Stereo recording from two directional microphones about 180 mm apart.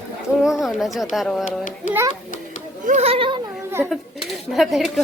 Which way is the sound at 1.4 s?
45° left (ahead or behind).